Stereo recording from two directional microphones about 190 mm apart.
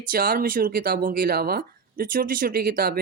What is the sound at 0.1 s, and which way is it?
Speech, 50° right (ahead or behind).